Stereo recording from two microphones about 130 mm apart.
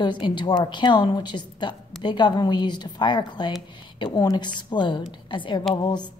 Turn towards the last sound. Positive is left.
turn(degrees=35)  # may be behind; listen again after turning